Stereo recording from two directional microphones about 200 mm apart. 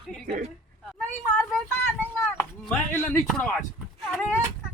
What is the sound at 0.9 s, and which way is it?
Speech, 5° left (ahead or behind).